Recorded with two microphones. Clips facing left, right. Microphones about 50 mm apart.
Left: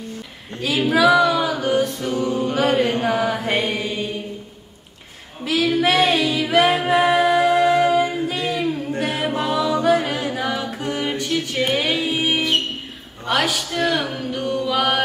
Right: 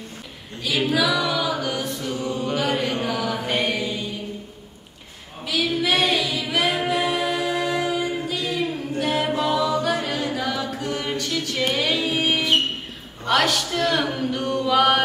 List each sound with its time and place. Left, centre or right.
0.6 s a capella: left
1.0 s music: left
2.4 s mantra: left
5.4 s singing: left
6.0 s a capella: left
7.2 s music: left
9.1 s a capella: left
10.8 s music: left; by 12.4 s centre
13.2 s male singing: centre